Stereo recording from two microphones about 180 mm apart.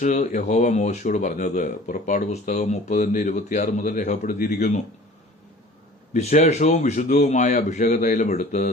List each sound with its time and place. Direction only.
0.0 s speech: 45° left (ahead or behind)
6.1 s speech: 40° left (ahead or behind)